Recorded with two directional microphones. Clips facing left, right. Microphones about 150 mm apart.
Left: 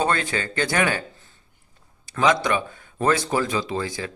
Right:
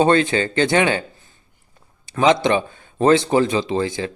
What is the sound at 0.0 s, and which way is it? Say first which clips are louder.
Speech: right 8 dB; 20° right (ahead or behind).